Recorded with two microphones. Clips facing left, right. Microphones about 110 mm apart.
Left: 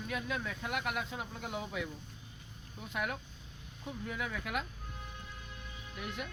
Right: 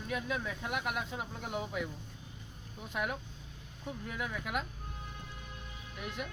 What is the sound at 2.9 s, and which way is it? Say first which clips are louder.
Speech: right 1 dB; 5° right (ahead or behind).